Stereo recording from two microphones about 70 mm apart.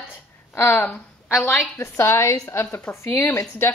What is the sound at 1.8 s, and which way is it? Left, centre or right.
A woman's voice, left.